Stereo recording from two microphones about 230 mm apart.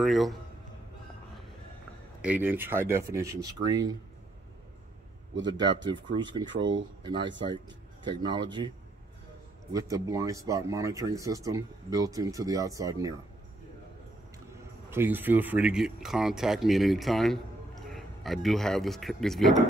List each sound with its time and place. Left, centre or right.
0.0 s speech: centre
2.2 s speech: centre
5.3 s a man's voice: right
6.1 s speech: centre
14.9 s speech: centre